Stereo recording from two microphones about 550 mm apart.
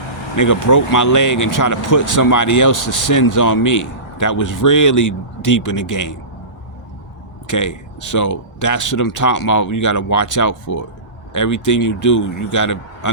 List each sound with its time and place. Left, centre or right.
0.3 s speech: left
7.4 s speech: left